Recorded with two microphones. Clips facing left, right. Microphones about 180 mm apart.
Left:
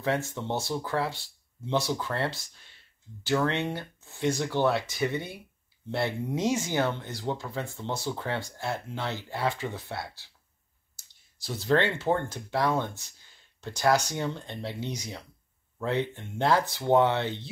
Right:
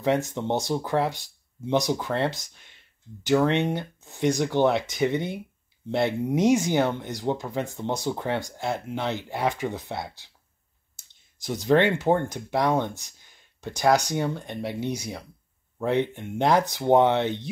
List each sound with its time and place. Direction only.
0.0 s speech: 15° right (ahead or behind)